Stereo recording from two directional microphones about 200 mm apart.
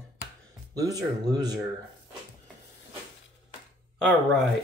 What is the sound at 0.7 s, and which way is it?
Speech, 15° right (ahead or behind).